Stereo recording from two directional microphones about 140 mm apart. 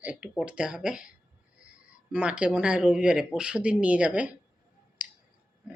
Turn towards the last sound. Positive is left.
turn(degrees=-10)  # may be behind; listen again after turning